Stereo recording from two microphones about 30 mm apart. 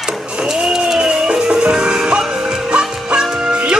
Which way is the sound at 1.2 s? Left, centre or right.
Right.